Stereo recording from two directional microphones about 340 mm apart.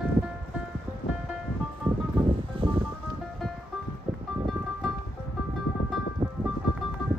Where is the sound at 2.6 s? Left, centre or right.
Centre.